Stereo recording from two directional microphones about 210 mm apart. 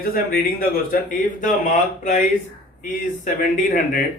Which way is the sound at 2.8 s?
35° left (ahead or behind).